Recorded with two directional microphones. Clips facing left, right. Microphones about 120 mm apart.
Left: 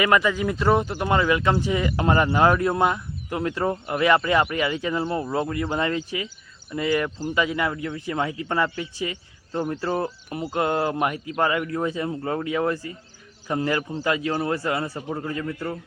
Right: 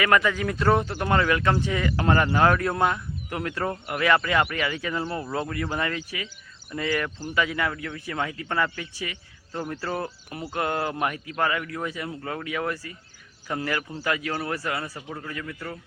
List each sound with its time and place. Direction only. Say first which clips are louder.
0.1 s a man's voice: left 2 dB; 10° left (ahead or behind); by 15.8 s 25° left (ahead or behind)